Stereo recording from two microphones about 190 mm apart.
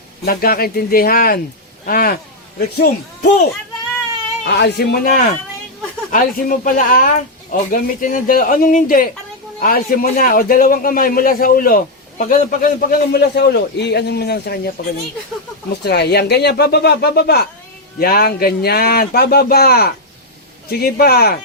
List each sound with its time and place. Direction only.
0.2 s a man's voice: 50° left (ahead or behind)
4.4 s a man's voice: 60° left (ahead or behind)
15.7 s speech: 60° left (ahead or behind)